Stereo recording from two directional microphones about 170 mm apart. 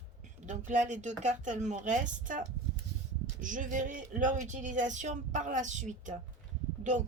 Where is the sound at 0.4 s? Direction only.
45° right (ahead or behind).